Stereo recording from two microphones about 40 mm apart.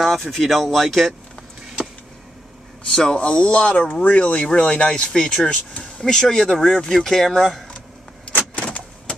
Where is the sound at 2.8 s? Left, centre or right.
Centre.